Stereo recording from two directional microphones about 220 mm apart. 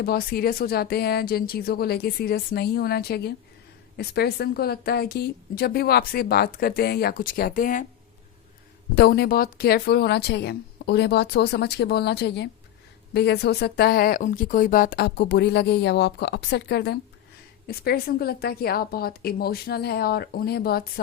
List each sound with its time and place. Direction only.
0.0 s speech: 45° left (ahead or behind)
9.0 s speech: 45° left (ahead or behind)